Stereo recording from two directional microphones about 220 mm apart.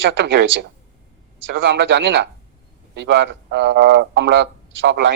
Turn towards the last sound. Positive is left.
turn(degrees=-55)  # may be behind; listen again after turning